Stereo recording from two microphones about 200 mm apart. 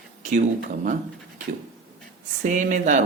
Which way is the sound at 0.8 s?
40° right (ahead or behind).